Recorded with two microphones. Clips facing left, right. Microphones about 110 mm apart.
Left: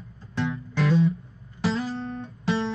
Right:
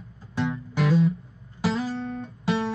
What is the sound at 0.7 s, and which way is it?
Music, centre (ahead or behind).